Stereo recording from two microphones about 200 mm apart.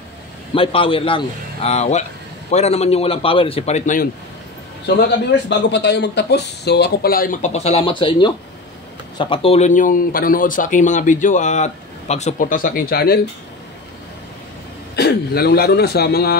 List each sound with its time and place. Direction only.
0.6 s a man's voice: 25° left (ahead or behind)
5.5 s speech: 60° left (ahead or behind)
15.0 s speech: 50° left (ahead or behind)